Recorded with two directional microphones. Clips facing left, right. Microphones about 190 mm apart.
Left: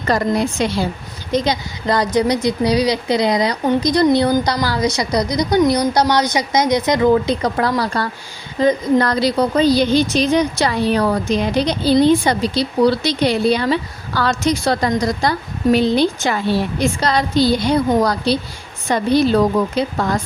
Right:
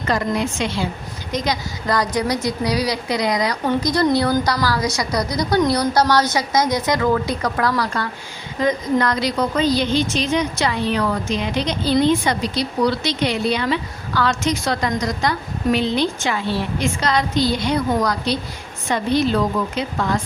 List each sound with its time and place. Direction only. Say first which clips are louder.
0.0 s a woman's voice: left 3 dB; 40° left (ahead or behind)
1.3 s a woman's voice: left 5 dB; 25° left (ahead or behind)